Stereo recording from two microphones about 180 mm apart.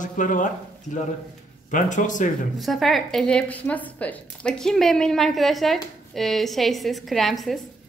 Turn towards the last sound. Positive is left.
turn(degrees=0)  # may be behind; listen again after turning